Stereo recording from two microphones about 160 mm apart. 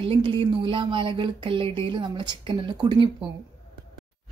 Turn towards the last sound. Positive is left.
turn(degrees=-30)  # may be behind; listen again after turning